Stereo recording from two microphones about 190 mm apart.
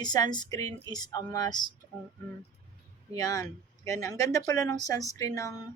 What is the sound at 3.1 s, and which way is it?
Speech, 20° left (ahead or behind).